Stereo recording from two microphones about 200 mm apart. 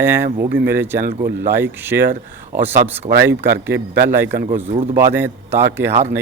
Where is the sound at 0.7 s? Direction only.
10° right (ahead or behind).